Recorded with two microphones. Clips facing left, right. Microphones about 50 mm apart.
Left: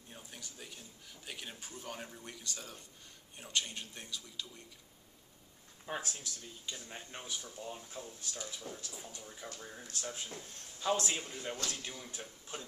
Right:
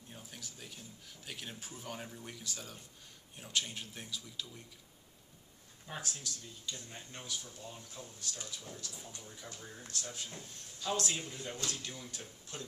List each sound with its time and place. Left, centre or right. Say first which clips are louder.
0.1 s speech: even; centre
5.9 s speech: left 3 dB; left